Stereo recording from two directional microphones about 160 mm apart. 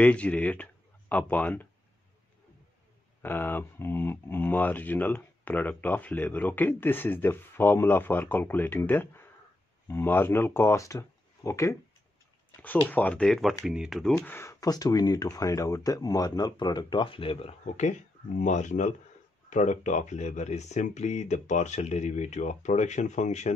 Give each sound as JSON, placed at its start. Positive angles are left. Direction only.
{"t": 0.0, "sound": "speech", "side_deg": 10}
{"t": 3.2, "sound": "speech", "side_deg": 10}